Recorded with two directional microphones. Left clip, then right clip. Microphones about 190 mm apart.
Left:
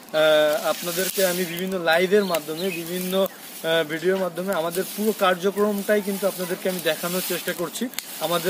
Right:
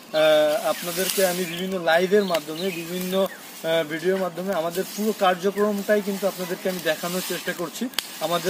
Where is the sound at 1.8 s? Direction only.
20° left (ahead or behind).